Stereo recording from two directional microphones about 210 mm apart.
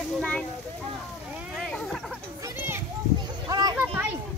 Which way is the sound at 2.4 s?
10° right (ahead or behind).